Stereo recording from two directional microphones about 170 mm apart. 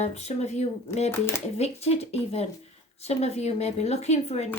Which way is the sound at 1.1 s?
15° left (ahead or behind).